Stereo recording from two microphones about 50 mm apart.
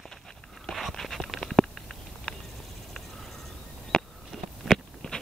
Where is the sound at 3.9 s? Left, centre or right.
Centre.